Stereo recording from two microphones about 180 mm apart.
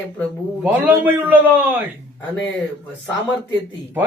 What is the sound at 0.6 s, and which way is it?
Speech, 10° right (ahead or behind).